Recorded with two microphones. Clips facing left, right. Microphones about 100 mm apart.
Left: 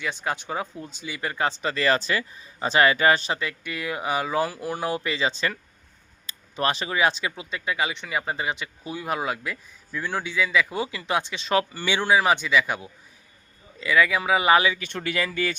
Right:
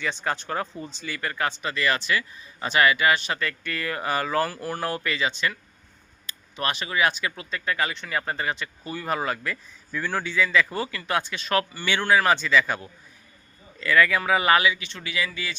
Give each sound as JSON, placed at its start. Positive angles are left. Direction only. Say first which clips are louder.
{"t": 0.0, "sound": "speech", "louder": "right 1 dB", "side_deg": 10}
{"t": 3.3, "sound": "speech", "louder": "right 1 dB", "side_deg": 15}
{"t": 12.1, "sound": "speech", "louder": "right 1 dB", "side_deg": 15}
{"t": 14.6, "sound": "speech", "louder": "even", "side_deg": 35}
{"t": 14.8, "sound": "speech", "louder": "left 3 dB", "side_deg": 50}